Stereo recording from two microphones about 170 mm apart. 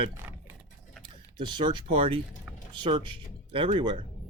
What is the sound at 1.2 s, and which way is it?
Speech, 25° right (ahead or behind).